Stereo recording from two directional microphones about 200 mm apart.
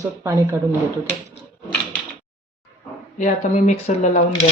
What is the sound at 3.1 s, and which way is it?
Speech, 40° left (ahead or behind).